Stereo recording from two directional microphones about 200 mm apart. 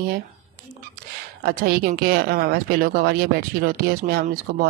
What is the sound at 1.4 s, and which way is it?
Speech, 50° right (ahead or behind).